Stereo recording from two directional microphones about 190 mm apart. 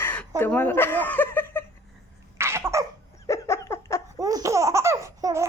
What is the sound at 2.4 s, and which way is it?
Cough, 15° right (ahead or behind).